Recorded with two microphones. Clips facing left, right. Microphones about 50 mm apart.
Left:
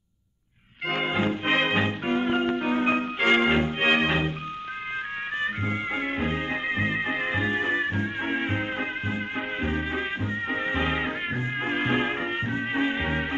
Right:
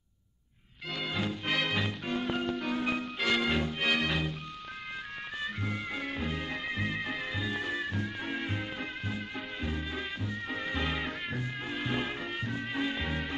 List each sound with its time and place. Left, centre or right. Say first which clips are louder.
0.8 s music: left 9 dB; left
5.4 s music: left 6 dB; left